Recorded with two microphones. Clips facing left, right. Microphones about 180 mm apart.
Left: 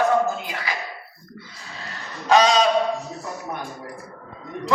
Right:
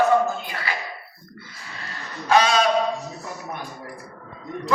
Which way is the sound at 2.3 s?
15° left (ahead or behind).